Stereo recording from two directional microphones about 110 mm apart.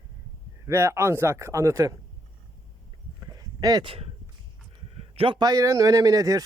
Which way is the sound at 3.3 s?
35° right (ahead or behind).